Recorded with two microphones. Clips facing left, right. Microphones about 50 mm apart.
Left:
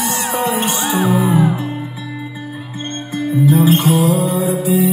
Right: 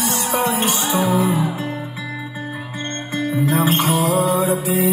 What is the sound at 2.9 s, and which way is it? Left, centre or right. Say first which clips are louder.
Music: left 3 dB; right.